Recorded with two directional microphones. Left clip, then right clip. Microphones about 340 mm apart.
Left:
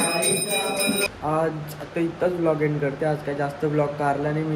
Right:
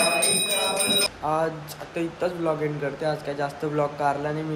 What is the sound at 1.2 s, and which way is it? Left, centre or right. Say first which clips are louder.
Speech: left 1 dB; centre.